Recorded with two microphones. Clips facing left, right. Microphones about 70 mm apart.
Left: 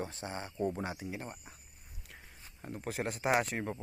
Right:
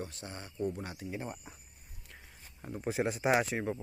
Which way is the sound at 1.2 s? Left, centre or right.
Centre.